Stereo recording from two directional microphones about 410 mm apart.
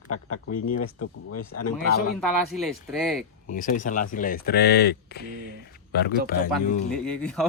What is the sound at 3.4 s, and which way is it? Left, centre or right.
Speech, centre.